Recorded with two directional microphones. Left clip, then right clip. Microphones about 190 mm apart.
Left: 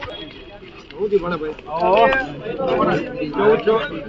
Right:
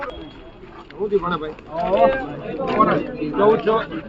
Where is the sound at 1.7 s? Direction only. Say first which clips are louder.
Left 4 dB; 40° left (ahead or behind).